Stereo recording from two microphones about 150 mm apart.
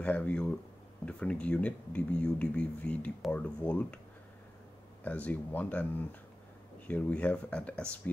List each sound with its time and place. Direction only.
0.0 s speech: 10° left (ahead or behind)
5.0 s speech: 10° left (ahead or behind)